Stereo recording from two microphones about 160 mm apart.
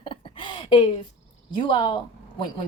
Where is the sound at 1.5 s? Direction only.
30° left (ahead or behind).